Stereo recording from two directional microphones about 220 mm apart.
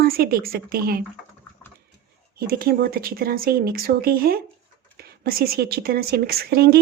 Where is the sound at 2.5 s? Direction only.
45° right (ahead or behind).